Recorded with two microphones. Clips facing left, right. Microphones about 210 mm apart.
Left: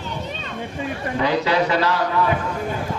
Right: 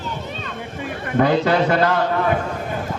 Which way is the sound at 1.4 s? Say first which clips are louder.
Right 2 dB; 50° right (ahead or behind).